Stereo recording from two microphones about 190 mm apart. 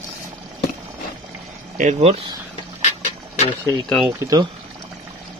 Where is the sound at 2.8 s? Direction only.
35° left (ahead or behind).